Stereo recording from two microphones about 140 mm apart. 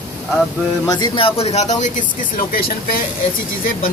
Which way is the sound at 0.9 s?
35° left (ahead or behind).